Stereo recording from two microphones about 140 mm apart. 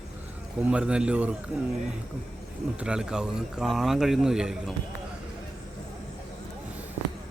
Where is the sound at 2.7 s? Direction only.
5° right (ahead or behind).